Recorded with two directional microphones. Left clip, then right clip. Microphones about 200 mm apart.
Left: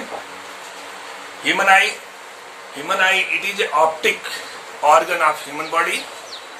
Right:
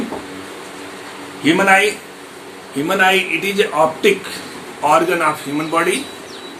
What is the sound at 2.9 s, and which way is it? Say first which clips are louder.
Speech: right 2 dB; 20° right (ahead or behind).